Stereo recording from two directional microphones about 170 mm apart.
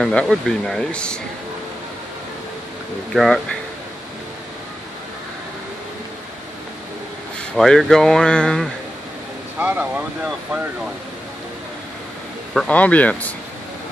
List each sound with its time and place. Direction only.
0.0 s speech: 5° left (ahead or behind)
3.1 s speech: centre (ahead or behind)
7.5 s speech: centre (ahead or behind)
9.6 s speech: 10° right (ahead or behind)
12.5 s speech: 10° left (ahead or behind)